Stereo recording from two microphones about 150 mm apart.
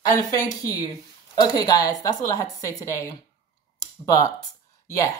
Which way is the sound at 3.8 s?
25° left (ahead or behind).